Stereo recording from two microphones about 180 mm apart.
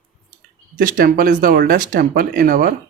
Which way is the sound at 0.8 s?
50° right (ahead or behind).